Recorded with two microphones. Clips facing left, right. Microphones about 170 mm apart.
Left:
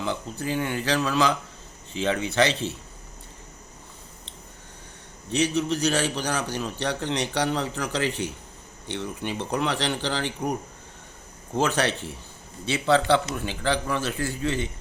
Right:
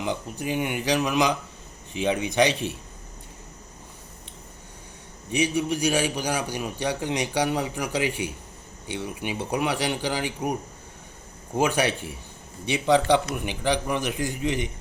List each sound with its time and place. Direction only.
0.0 s a man's voice: 15° right (ahead or behind)
5.3 s a man's voice: 10° right (ahead or behind)